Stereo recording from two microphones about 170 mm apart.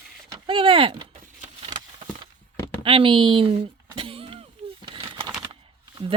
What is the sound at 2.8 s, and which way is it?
Speech, 30° right (ahead or behind).